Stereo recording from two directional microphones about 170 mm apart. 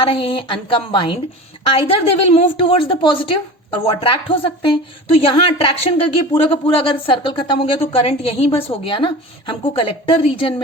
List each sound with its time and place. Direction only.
0.0 s a woman's voice: 35° left (ahead or behind)